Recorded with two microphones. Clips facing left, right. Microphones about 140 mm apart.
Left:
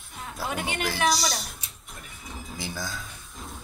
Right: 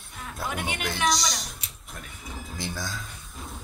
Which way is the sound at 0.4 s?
Centre (ahead or behind).